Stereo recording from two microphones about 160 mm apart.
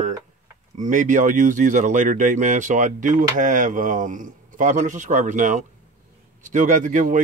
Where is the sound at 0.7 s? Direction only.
50° right (ahead or behind).